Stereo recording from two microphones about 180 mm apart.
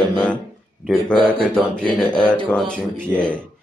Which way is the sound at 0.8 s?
5° left (ahead or behind).